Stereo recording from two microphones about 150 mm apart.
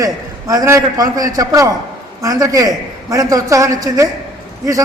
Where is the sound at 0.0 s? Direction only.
25° right (ahead or behind).